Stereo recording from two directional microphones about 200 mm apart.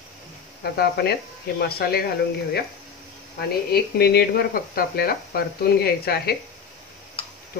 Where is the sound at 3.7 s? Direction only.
50° left (ahead or behind).